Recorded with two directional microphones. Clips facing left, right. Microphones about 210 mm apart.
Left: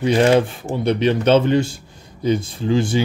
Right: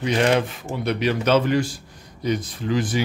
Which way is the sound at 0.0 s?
30° left (ahead or behind).